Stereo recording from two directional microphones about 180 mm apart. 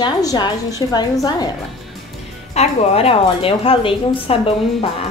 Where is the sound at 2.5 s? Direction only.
35° left (ahead or behind).